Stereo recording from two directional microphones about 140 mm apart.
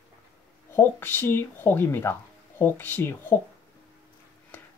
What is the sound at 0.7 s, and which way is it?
Speech, 15° left (ahead or behind).